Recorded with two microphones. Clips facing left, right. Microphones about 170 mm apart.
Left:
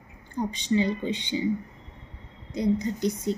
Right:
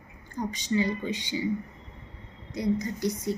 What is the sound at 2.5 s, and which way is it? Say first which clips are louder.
Speech: left 3 dB; 30° left (ahead or behind).